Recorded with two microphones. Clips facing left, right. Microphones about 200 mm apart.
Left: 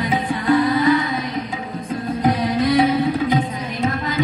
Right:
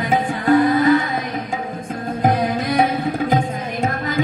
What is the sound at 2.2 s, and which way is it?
Music, 50° right (ahead or behind).